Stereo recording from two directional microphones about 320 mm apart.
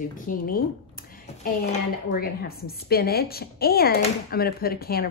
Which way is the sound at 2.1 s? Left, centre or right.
Left.